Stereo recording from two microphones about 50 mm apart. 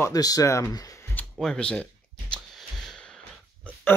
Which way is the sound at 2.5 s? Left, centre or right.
Centre.